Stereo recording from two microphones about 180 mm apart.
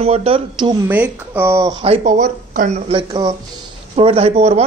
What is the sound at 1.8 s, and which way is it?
Speech, 40° right (ahead or behind).